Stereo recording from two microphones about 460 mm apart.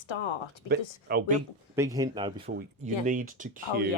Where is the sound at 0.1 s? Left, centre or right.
Left.